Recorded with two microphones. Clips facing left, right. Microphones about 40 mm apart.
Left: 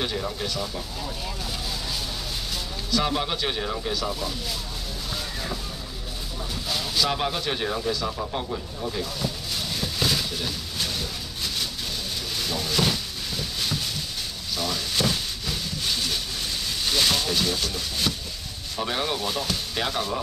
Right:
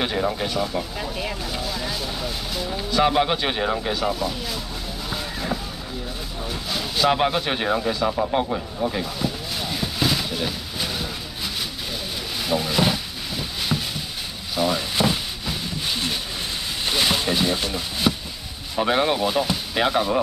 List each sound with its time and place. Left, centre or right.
0.0 s a man's voice: right
1.7 s vehicle: centre
2.7 s a man's voice: right
7.0 s a man's voice: right
9.2 s a sound: centre
12.4 s a sound: centre
18.8 s a man's voice: right